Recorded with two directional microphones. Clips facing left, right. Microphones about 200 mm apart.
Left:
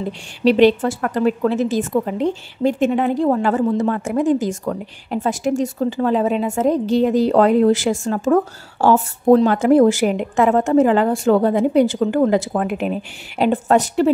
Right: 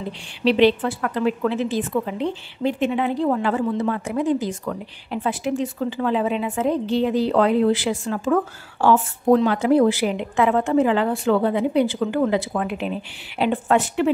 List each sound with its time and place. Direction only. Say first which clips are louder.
0.4 s a woman's voice: left 4 dB; 45° left (ahead or behind)